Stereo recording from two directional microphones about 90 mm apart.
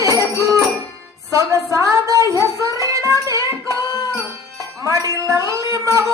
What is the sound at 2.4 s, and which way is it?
Music, 35° right (ahead or behind).